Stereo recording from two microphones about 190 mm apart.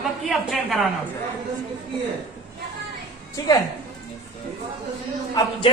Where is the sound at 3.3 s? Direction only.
20° left (ahead or behind).